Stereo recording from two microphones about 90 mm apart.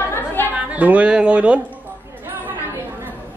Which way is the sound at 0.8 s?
15° right (ahead or behind).